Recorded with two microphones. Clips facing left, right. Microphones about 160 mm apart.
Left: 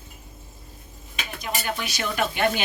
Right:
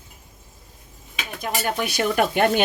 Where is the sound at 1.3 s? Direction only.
45° right (ahead or behind).